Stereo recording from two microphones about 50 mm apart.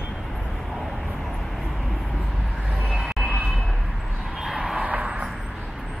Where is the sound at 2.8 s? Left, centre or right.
Centre.